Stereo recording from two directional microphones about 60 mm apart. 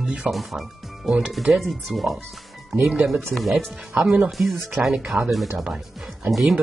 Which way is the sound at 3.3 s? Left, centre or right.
Centre.